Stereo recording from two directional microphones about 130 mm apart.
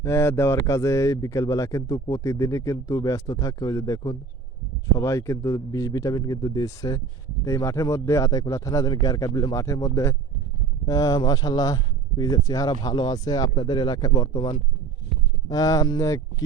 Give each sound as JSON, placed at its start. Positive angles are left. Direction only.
{"t": 0.0, "sound": "speech", "side_deg": 20}